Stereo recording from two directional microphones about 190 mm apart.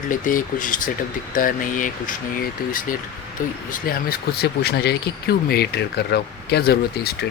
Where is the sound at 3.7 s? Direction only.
50° left (ahead or behind).